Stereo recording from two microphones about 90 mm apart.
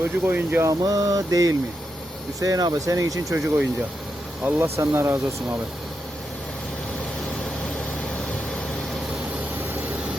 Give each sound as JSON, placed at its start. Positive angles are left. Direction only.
{"t": 0.0, "sound": "speech", "side_deg": -25}
{"t": 0.7, "sound": "speech", "side_deg": -40}